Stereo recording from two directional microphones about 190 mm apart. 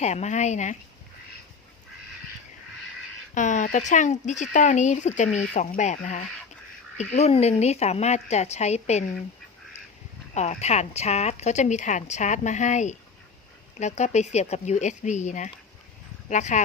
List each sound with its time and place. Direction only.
0.0 s speech: 35° left (ahead or behind)
3.3 s speech: 40° left (ahead or behind)
10.3 s speech: 35° left (ahead or behind)